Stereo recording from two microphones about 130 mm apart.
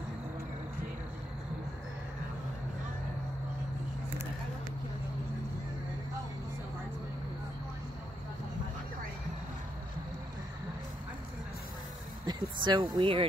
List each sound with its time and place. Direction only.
12.3 s speech: 35° right (ahead or behind)